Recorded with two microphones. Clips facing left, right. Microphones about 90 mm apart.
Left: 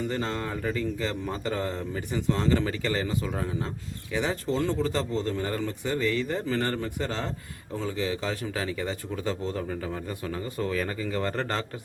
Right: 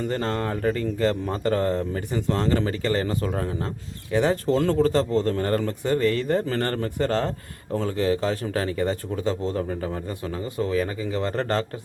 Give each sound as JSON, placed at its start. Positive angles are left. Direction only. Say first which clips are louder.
{"t": 0.1, "sound": "speech", "louder": "right 4 dB", "side_deg": -45}
{"t": 11.3, "sound": "speech", "louder": "right 5 dB", "side_deg": -40}